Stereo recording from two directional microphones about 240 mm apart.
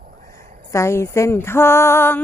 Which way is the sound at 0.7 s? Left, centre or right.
Centre.